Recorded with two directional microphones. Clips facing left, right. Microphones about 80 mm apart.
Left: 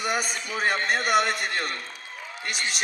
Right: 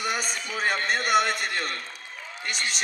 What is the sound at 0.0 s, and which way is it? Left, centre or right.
A man's voice, centre.